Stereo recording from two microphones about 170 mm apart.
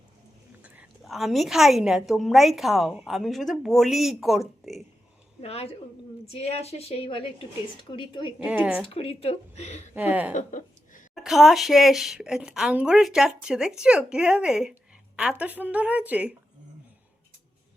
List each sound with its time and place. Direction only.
0.6 s a woman's voice: 5° right (ahead or behind)
5.4 s a woman's voice: 35° left (ahead or behind)
8.4 s speech: 10° right (ahead or behind)
8.9 s a woman's voice: 35° left (ahead or behind)
9.9 s speech: 10° right (ahead or behind)
10.3 s a sound: 45° left (ahead or behind)
11.1 s a woman's voice: centre (ahead or behind)